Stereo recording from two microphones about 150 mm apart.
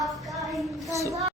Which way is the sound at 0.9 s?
20° right (ahead or behind).